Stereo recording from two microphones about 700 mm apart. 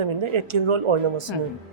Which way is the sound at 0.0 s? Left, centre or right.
Right.